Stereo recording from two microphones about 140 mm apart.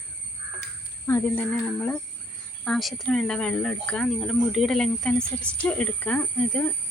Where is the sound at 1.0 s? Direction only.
20° left (ahead or behind).